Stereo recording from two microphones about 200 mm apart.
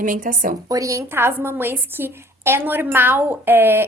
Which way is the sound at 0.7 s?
15° right (ahead or behind).